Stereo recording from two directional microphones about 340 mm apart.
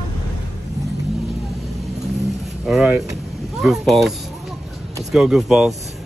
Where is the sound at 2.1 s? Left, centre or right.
Centre.